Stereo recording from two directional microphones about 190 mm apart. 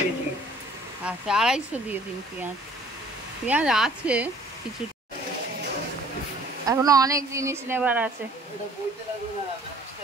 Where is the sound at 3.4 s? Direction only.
5° right (ahead or behind).